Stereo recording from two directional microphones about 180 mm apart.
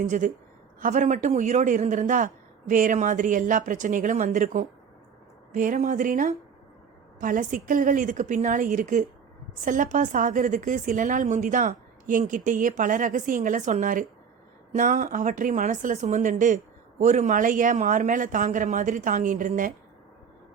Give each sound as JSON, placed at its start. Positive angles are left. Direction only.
{"t": 0.0, "sound": "a woman's voice", "side_deg": -45}